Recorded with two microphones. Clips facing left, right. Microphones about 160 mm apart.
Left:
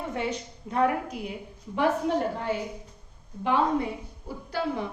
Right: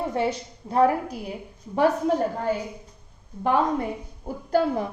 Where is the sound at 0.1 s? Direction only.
35° right (ahead or behind).